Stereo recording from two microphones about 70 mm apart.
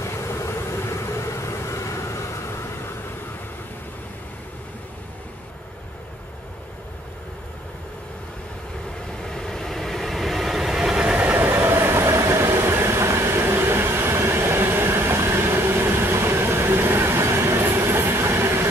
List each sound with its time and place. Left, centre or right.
0.3 s vehicle: left
9.2 s train: centre
11.2 s train: right